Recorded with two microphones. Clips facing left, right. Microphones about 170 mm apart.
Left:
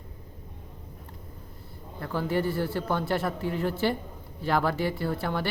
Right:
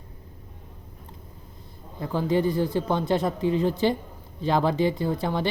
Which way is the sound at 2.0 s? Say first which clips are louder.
Right 4 dB; 15° right (ahead or behind).